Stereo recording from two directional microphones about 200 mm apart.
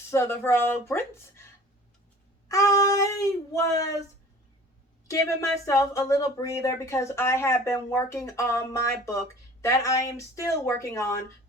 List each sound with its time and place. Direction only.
0.1 s speech: 10° left (ahead or behind)
2.5 s speech: 15° left (ahead or behind)
5.1 s speech: 15° left (ahead or behind)